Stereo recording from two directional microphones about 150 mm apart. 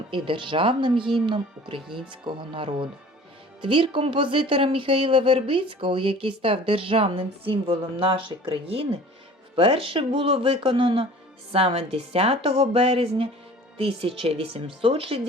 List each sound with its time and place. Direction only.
0.1 s speech: 35° right (ahead or behind)